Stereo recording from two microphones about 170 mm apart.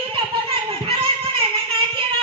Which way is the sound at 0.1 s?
30° right (ahead or behind).